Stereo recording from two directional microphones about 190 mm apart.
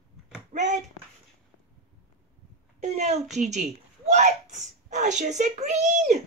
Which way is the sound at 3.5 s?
40° right (ahead or behind).